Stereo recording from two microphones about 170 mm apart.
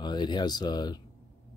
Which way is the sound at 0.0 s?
25° left (ahead or behind).